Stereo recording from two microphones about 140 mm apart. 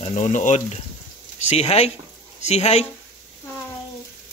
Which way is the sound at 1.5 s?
50° left (ahead or behind).